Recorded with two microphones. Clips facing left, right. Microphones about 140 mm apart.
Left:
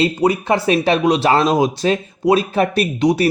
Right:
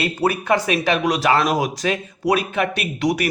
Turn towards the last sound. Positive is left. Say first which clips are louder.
# left 5 dB
turn(degrees=25)  # may be behind; listen again after turning